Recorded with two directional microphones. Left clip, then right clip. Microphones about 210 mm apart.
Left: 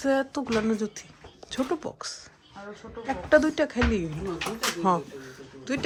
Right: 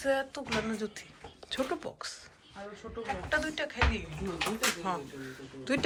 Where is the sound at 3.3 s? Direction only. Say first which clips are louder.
Left 12 dB; 25° left (ahead or behind).